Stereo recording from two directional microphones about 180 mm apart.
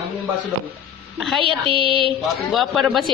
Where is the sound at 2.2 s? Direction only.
Centre (ahead or behind).